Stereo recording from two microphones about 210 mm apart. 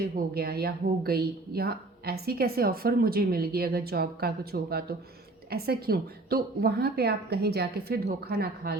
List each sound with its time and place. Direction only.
0.0 s a woman's voice: 45° right (ahead or behind)